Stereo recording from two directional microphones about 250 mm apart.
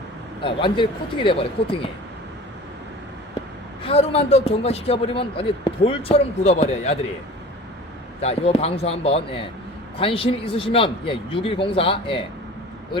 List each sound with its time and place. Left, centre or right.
0.4 s a man's voice: centre
3.8 s a man's voice: left
8.2 s a man's voice: left